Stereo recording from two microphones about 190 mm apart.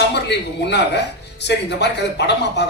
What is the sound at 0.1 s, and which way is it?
Speech, 60° left (ahead or behind).